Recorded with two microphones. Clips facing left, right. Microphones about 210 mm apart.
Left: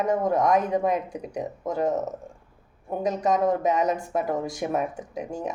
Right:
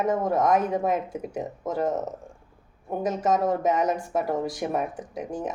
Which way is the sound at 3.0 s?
Centre (ahead or behind).